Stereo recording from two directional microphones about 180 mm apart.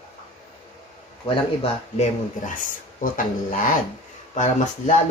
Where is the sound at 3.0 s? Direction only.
50° left (ahead or behind).